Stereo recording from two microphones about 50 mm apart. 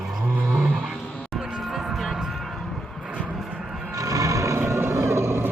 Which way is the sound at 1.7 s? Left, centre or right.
Centre.